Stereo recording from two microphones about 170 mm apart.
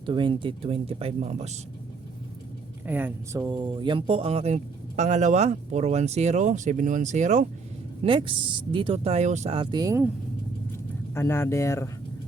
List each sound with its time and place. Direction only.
0.0 s speech: 30° right (ahead or behind)
2.8 s speech: 10° right (ahead or behind); by 7.4 s 45° right (ahead or behind)
8.0 s speech: 30° right (ahead or behind)
9.8 s speech: 15° right (ahead or behind)
11.1 s speech: 15° left (ahead or behind)